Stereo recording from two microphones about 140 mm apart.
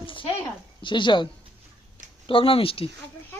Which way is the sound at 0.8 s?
35° left (ahead or behind).